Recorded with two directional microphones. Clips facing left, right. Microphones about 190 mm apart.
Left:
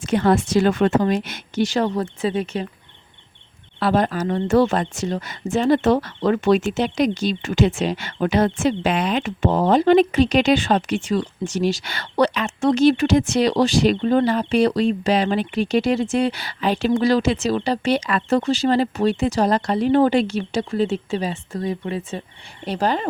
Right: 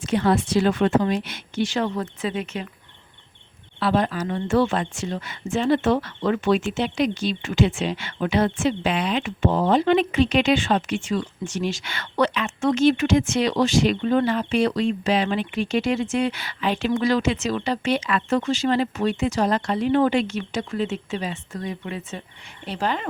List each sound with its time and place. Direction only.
0.0 s speech: 45° left (ahead or behind)
3.8 s speech: 45° left (ahead or behind)